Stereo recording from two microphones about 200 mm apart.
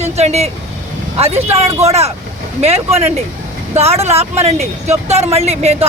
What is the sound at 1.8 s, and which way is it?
Speech, 30° right (ahead or behind).